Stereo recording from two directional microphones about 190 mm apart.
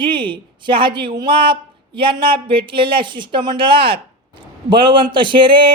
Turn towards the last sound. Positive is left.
turn(degrees=-25)  # may be behind; listen again after turning